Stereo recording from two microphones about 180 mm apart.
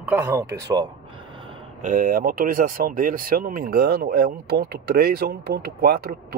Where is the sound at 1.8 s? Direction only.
45° right (ahead or behind).